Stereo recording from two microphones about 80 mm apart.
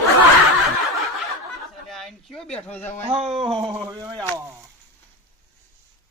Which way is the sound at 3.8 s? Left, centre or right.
Right.